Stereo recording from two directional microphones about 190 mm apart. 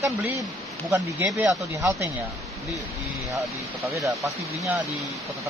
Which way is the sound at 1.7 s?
15° right (ahead or behind).